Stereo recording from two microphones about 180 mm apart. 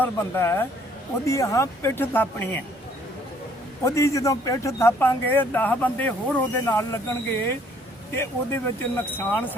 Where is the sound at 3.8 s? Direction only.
15° left (ahead or behind).